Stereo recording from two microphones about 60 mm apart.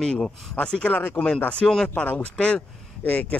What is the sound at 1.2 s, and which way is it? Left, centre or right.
Speech, centre.